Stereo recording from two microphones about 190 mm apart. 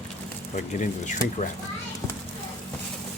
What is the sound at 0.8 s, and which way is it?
Speech, 40° left (ahead or behind).